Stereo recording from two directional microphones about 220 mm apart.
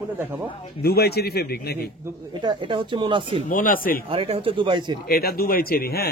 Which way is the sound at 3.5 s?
40° left (ahead or behind).